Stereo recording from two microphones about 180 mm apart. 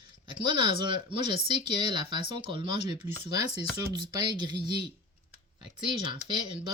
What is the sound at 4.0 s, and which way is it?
Speech, 25° right (ahead or behind).